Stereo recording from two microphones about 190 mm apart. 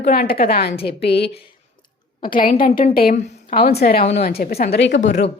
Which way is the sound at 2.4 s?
45° left (ahead or behind).